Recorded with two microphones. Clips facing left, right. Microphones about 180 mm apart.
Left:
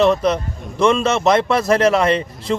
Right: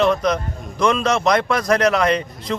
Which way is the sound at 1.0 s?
5° left (ahead or behind).